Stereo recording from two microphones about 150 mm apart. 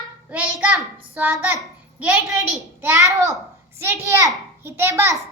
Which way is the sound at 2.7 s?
20° right (ahead or behind).